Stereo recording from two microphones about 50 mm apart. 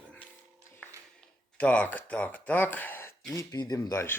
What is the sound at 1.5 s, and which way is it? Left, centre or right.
Speech, left.